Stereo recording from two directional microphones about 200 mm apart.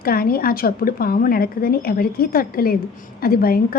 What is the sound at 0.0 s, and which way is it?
Speech, 50° left (ahead or behind).